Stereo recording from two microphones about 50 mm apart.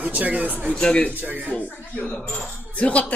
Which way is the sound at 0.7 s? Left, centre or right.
Left.